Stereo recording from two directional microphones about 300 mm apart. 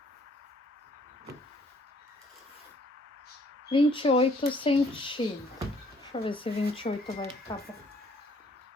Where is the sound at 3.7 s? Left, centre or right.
Centre.